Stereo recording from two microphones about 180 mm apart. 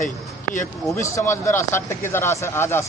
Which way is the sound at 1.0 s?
15° left (ahead or behind).